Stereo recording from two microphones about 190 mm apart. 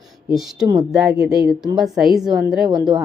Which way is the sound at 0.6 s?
20° right (ahead or behind).